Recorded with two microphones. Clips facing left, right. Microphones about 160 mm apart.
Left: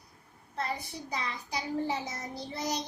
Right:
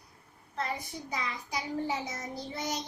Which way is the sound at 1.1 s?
30° left (ahead or behind).